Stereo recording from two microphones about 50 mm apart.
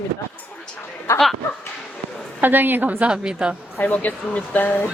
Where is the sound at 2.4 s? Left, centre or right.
Right.